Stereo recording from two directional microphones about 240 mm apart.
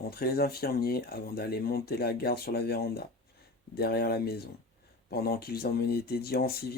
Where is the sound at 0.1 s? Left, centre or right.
Left.